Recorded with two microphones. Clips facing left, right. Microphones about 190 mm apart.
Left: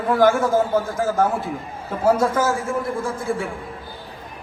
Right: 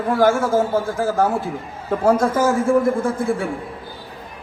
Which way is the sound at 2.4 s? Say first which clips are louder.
Right 3 dB; 15° right (ahead or behind).